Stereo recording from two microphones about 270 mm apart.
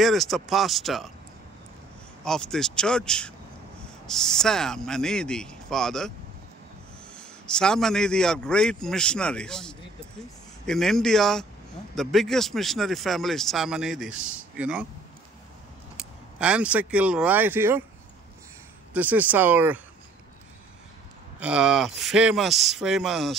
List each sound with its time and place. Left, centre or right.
0.0 s a man's voice: centre
2.2 s a man's voice: centre
7.2 s a man's voice: centre
16.3 s a man's voice: centre
18.9 s speech: centre
21.4 s a man's voice: centre